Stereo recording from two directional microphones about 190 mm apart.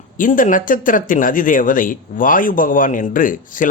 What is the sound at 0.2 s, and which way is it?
Speech, 45° left (ahead or behind).